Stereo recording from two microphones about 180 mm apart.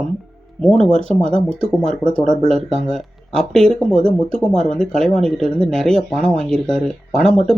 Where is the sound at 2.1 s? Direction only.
5° left (ahead or behind).